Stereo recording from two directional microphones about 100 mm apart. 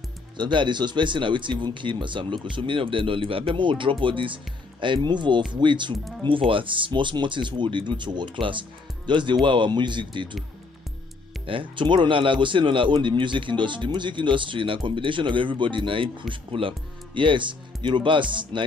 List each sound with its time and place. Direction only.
0.4 s speech: 50° right (ahead or behind)
11.4 s speech: 55° right (ahead or behind)